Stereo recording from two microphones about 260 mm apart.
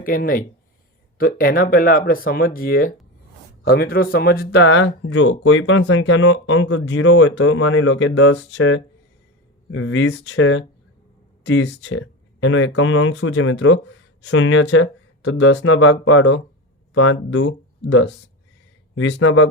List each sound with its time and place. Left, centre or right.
0.0 s speech: left